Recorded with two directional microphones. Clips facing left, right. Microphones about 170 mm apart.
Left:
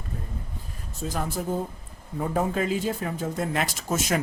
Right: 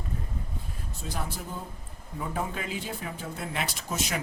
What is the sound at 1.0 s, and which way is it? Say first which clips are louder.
Speech: left 8 dB; 45° left (ahead or behind).